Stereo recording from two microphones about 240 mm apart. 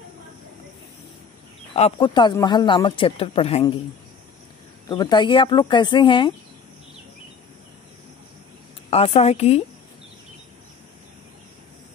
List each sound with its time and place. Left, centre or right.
1.7 s speech: left
4.8 s speech: centre
8.9 s speech: left